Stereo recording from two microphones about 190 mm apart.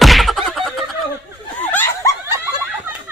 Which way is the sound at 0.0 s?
Centre (ahead or behind).